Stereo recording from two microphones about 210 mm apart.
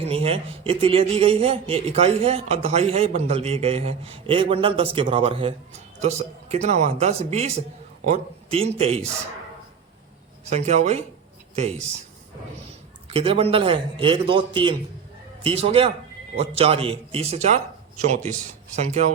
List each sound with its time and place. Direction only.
0.0 s a man's voice: 30° right (ahead or behind)
10.5 s speech: 35° right (ahead or behind)
13.1 s a man's voice: 25° right (ahead or behind)